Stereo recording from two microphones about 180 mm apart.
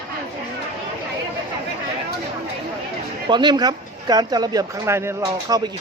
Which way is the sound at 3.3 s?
25° right (ahead or behind).